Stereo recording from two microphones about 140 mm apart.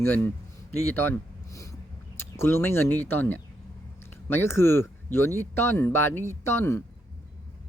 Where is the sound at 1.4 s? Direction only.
25° left (ahead or behind).